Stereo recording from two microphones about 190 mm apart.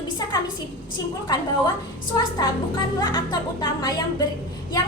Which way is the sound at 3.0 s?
20° left (ahead or behind).